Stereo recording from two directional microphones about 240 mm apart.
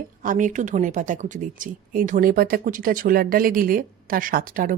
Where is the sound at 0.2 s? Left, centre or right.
Right.